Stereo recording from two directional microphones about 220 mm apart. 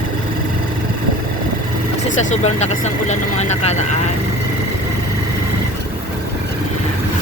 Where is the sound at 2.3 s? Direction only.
30° left (ahead or behind).